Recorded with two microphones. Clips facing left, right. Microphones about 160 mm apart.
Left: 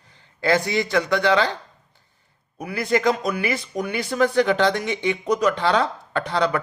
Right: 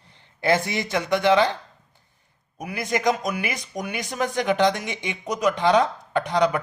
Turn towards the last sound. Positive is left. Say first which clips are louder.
# right 1 dB
turn(degrees=-15)  # may be behind; listen again after turning